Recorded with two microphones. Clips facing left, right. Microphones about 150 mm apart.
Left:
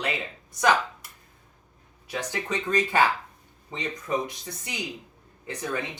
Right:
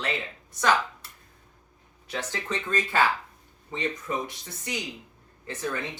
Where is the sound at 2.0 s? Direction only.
15° left (ahead or behind).